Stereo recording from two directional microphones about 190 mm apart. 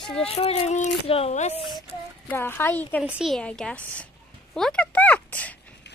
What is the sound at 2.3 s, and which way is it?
Speech, 10° left (ahead or behind).